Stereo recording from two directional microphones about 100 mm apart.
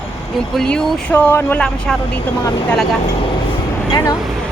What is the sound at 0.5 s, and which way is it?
Speech, 10° left (ahead or behind).